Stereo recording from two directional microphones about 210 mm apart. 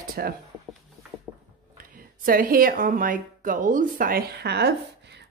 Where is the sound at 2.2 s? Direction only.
40° right (ahead or behind).